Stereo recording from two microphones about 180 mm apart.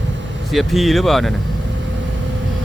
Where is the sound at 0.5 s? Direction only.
Centre (ahead or behind).